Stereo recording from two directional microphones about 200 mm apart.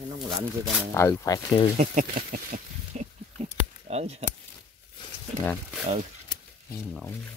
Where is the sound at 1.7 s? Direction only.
40° right (ahead or behind).